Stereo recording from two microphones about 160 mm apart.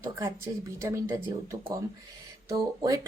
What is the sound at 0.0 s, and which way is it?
Speech, 15° right (ahead or behind).